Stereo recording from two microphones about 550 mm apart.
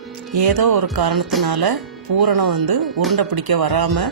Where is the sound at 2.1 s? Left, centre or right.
Right.